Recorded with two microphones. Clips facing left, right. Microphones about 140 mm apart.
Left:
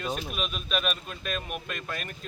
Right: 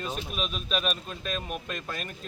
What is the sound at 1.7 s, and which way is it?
Speech, 35° right (ahead or behind).